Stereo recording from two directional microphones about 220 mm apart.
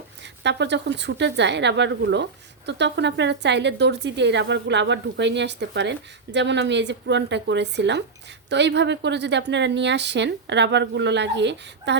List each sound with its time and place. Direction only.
0.4 s speech: 50° right (ahead or behind)